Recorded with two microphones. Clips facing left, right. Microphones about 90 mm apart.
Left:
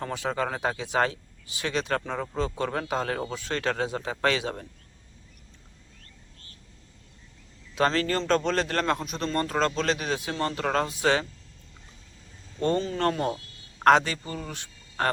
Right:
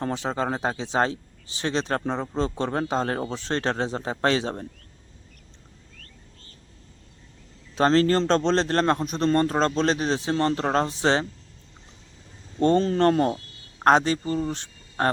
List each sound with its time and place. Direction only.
0.1 s a man's voice: 25° right (ahead or behind)
7.8 s a man's voice: 35° right (ahead or behind)
12.5 s a man's voice: 30° right (ahead or behind)